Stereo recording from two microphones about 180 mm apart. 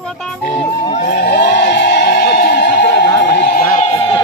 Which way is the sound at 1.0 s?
65° left (ahead or behind).